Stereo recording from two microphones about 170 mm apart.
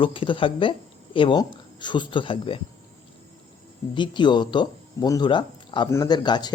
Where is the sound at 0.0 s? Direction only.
30° left (ahead or behind).